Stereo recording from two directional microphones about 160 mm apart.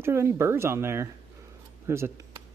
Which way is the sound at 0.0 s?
15° right (ahead or behind).